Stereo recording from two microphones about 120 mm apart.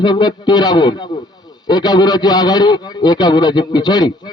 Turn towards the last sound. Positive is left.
turn(degrees=35)  # may be behind; listen again after turning